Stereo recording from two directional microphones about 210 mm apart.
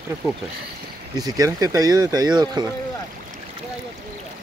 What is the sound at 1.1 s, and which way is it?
Speech, 20° right (ahead or behind).